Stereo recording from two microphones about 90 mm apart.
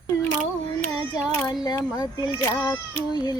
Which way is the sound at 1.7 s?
45° left (ahead or behind).